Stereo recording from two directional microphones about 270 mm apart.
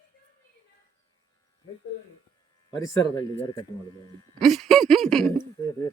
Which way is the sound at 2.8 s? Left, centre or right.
Centre.